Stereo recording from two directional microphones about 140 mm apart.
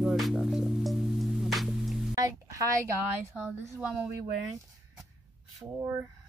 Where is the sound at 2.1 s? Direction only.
25° right (ahead or behind).